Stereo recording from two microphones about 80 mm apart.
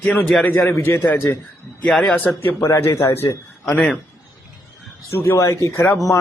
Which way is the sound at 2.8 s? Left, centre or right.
Left.